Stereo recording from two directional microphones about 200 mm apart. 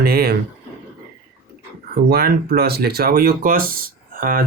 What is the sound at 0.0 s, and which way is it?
Speech, 50° right (ahead or behind).